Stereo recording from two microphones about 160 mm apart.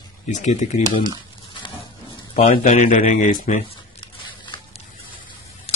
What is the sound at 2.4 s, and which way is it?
Speech, 45° left (ahead or behind).